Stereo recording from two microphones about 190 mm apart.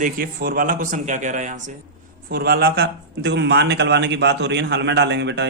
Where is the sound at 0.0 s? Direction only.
50° right (ahead or behind).